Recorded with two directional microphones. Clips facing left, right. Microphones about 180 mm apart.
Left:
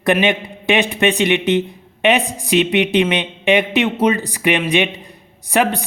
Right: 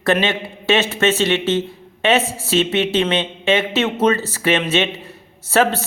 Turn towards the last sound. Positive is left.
turn(degrees=15)  # may be behind; listen again after turning